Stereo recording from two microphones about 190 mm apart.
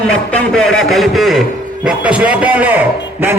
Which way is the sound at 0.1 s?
5° left (ahead or behind).